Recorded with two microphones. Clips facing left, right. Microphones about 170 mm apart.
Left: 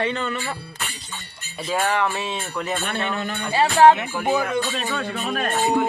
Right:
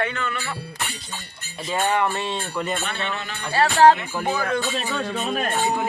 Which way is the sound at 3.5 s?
15° left (ahead or behind).